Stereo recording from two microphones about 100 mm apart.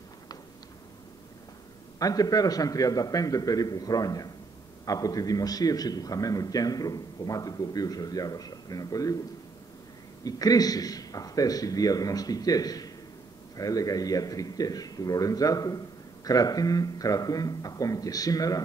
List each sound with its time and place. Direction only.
2.0 s a man's voice: 35° left (ahead or behind)
10.2 s a man's voice: 40° left (ahead or behind)